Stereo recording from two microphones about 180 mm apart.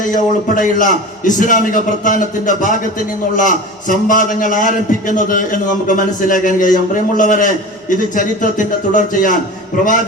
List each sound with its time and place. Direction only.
0.1 s a man's voice: 45° left (ahead or behind)